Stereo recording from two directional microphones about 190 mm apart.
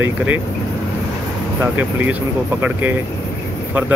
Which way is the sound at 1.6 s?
10° right (ahead or behind).